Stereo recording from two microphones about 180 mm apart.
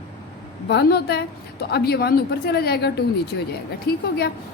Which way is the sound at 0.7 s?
70° left (ahead or behind).